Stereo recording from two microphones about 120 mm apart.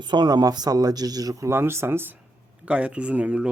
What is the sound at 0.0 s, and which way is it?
Speech, 40° right (ahead or behind).